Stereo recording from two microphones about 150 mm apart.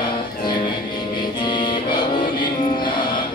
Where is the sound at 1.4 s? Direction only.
30° left (ahead or behind).